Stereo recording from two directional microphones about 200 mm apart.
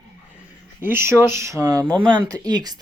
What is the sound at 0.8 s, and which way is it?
Speech, 10° right (ahead or behind).